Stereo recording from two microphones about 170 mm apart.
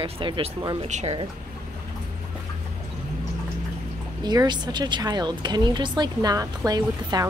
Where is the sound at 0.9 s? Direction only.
45° right (ahead or behind).